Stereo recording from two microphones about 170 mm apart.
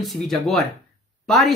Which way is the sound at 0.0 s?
Centre (ahead or behind).